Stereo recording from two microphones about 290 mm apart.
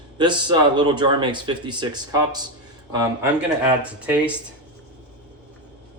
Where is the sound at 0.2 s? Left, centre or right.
Centre.